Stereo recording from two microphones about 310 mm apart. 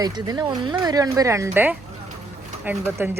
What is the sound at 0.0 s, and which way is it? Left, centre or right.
Speech, centre.